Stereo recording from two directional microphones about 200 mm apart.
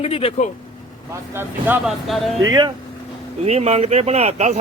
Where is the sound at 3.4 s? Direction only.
30° right (ahead or behind).